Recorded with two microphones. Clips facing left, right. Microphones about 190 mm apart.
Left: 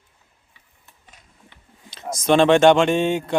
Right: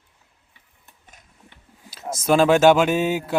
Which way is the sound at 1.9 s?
5° right (ahead or behind).